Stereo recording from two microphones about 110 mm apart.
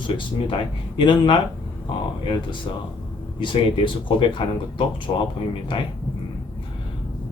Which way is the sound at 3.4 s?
50° left (ahead or behind).